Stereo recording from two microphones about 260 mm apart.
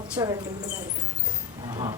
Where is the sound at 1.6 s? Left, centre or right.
Centre.